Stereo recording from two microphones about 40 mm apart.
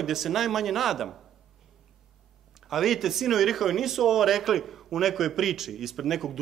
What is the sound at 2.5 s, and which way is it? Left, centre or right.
A man's voice, centre.